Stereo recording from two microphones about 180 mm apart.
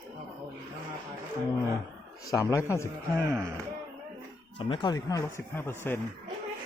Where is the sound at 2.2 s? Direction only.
20° left (ahead or behind).